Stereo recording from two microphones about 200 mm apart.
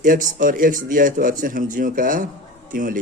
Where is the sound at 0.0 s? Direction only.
40° right (ahead or behind).